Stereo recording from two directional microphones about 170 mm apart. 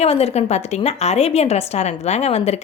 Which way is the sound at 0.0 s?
35° left (ahead or behind).